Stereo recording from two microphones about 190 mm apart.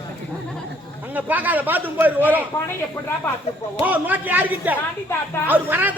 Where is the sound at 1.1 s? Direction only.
10° right (ahead or behind).